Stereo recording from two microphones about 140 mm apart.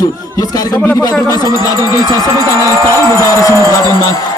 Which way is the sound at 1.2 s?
25° left (ahead or behind).